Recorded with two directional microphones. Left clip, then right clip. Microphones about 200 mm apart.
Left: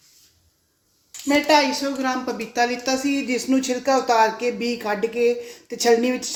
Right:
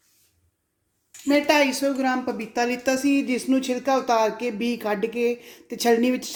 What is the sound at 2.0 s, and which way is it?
Speech, 35° right (ahead or behind).